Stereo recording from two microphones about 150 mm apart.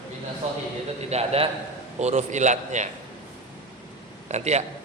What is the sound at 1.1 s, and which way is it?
A man's voice, 45° right (ahead or behind).